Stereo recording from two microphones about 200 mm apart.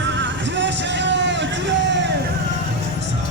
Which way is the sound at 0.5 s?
65° right (ahead or behind).